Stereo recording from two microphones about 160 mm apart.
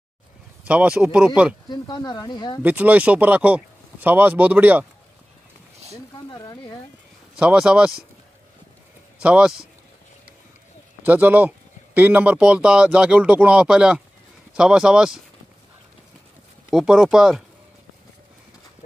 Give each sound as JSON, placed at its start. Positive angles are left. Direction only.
{"t": 0.7, "sound": "speech", "side_deg": -5}
{"t": 1.7, "sound": "speech", "side_deg": 25}
{"t": 2.6, "sound": "speech", "side_deg": -10}
{"t": 6.1, "sound": "speech", "side_deg": 25}
{"t": 7.3, "sound": "speech", "side_deg": -5}
{"t": 9.2, "sound": "speech", "side_deg": -5}
{"t": 11.0, "sound": "speech", "side_deg": -10}
{"t": 16.7, "sound": "speech", "side_deg": -5}